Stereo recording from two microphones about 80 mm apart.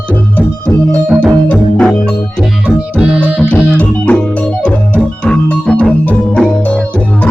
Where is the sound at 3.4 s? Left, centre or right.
Centre.